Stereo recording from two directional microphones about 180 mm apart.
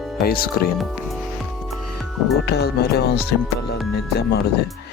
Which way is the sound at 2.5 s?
60° left (ahead or behind).